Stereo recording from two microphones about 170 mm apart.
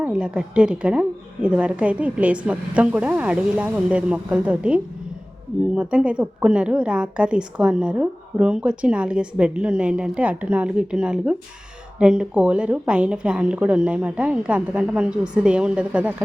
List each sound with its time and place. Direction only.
0.0 s a woman's voice: 5° right (ahead or behind)